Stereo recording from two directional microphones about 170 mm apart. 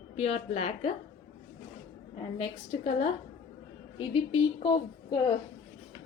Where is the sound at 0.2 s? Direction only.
40° left (ahead or behind).